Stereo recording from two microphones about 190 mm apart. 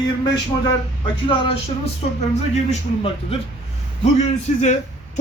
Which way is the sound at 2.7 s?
30° left (ahead or behind).